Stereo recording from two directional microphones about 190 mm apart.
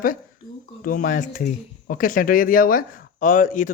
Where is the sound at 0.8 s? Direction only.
45° left (ahead or behind).